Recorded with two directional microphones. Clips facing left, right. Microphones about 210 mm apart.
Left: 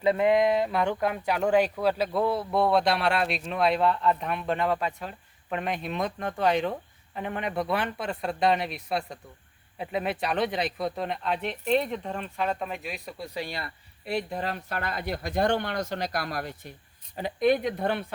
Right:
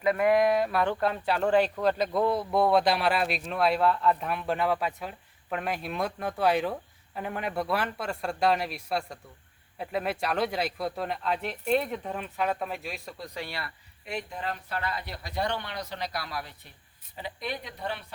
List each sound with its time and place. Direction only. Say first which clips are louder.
0.0 s speech: left 1 dB; 25° left (ahead or behind); by 13.2 s centre (ahead or behind)
13.3 s speech: left 3 dB; 15° left (ahead or behind)
14.0 s speech: left 5 dB; 35° left (ahead or behind); by 18.0 s 55° left (ahead or behind)